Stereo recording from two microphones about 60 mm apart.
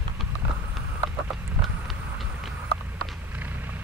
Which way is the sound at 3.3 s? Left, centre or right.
Right.